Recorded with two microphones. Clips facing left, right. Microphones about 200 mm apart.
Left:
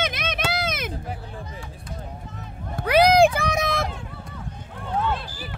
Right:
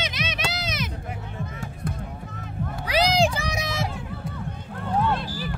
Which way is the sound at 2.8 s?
55° left (ahead or behind).